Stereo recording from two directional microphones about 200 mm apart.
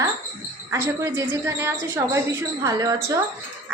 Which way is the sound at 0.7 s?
15° right (ahead or behind).